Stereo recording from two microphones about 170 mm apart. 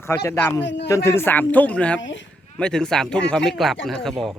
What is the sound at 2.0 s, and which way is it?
Speech, 90° left.